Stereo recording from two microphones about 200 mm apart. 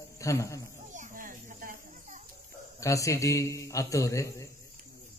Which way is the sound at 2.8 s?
15° left (ahead or behind).